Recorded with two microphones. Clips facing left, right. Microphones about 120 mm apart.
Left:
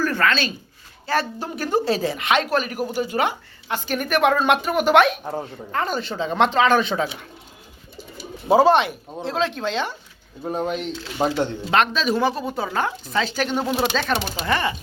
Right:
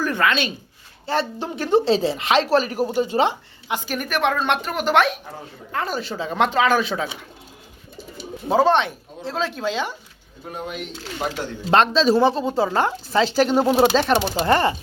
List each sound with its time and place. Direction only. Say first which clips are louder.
0.0 s speech: even; 15° right (ahead or behind)
3.7 s speech: even; 15° right (ahead or behind)
3.9 s speech: left 4 dB; centre (ahead or behind)
8.4 s speech: left 2 dB; 10° left (ahead or behind)
10.5 s speech: left 6 dB; 35° left (ahead or behind)
11.7 s speech: right 5 dB; 30° right (ahead or behind)
14.4 s speech: right 4 dB; 40° right (ahead or behind)